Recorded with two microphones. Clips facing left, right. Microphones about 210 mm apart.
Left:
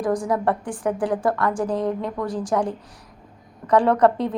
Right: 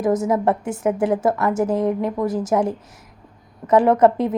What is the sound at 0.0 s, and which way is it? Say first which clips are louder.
A woman's voice: right 3 dB; 25° right (ahead or behind).